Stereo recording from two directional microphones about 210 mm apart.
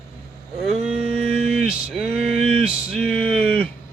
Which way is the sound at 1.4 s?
Centre (ahead or behind).